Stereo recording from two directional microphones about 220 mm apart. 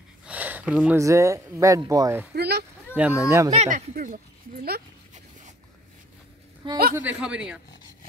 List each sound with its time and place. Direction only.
0.2 s speech: 5° right (ahead or behind)
2.3 s a sound: 45° right (ahead or behind)
3.0 s speech: 5° right (ahead or behind)
3.5 s speech: 35° right (ahead or behind)
6.6 s a man's voice: 25° right (ahead or behind)
7.0 s speech: 5° right (ahead or behind)